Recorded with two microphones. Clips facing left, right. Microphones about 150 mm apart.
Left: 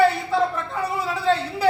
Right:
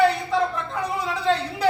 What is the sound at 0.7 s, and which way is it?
Speech, 5° left (ahead or behind).